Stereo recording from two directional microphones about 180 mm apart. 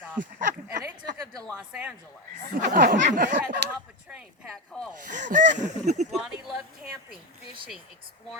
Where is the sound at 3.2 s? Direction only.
70° right (ahead or behind).